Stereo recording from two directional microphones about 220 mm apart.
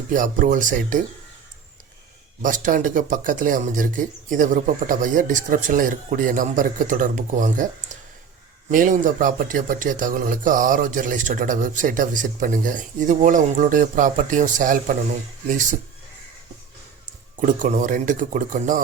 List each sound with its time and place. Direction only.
0.1 s speech: 35° right (ahead or behind)
2.4 s speech: 35° right (ahead or behind)
8.7 s speech: 35° right (ahead or behind)
17.4 s speech: 35° right (ahead or behind)